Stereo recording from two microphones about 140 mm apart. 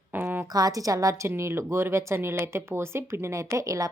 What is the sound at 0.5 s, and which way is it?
A woman's voice, 25° right (ahead or behind).